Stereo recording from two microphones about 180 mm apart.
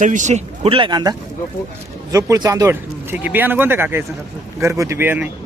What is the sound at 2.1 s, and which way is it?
Speech, 20° right (ahead or behind).